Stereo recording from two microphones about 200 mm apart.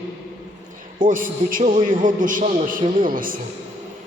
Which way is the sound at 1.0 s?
40° right (ahead or behind).